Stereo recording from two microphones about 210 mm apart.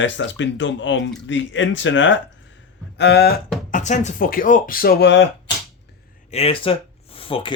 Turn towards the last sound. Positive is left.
turn(degrees=25)  # may be behind; listen again after turning